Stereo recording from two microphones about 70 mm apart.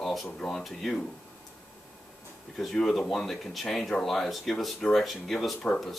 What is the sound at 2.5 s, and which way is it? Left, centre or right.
Speech, centre.